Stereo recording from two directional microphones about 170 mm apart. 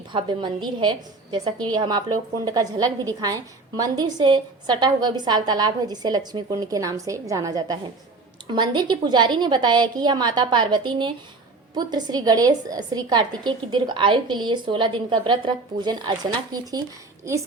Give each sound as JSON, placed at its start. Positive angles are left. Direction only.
{"t": 0.1, "sound": "a woman's voice", "side_deg": -30}